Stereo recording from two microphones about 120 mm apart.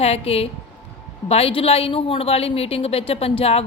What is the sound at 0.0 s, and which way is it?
A woman's voice, 55° left (ahead or behind).